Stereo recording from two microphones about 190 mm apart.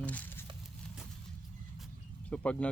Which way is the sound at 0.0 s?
10° left (ahead or behind).